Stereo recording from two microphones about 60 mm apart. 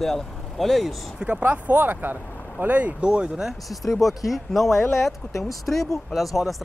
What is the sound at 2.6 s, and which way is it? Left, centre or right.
Speech, right.